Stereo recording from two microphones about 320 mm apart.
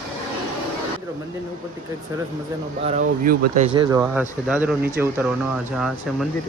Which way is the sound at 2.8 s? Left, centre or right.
Right.